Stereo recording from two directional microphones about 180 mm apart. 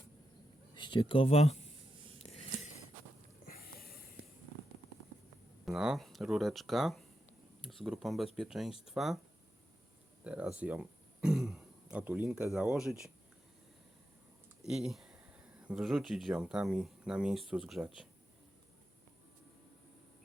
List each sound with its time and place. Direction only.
0.8 s speech: 25° left (ahead or behind)
3.4 s a sound: 55° left (ahead or behind)
5.6 s speech: centre (ahead or behind)
10.2 s speech: 5° right (ahead or behind)
14.7 s speech: centre (ahead or behind)